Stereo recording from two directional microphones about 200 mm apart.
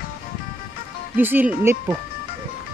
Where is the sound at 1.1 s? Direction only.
10° right (ahead or behind).